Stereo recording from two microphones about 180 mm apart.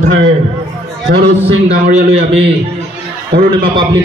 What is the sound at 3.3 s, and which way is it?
Speech, 65° right (ahead or behind).